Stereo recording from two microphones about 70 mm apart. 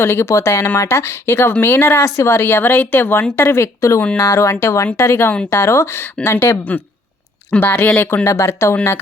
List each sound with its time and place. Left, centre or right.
0.0 s speech: left
3.8 s speech: left
7.5 s speech: left
8.2 s speech: left